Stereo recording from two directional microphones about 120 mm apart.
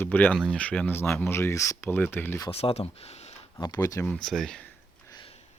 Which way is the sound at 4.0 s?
5° left (ahead or behind).